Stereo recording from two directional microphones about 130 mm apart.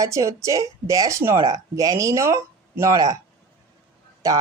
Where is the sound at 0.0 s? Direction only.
25° right (ahead or behind).